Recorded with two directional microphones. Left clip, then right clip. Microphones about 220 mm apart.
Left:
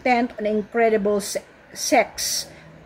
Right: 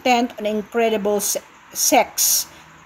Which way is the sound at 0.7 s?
70° right (ahead or behind).